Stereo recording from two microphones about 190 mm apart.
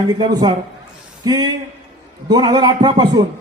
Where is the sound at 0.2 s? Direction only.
20° right (ahead or behind).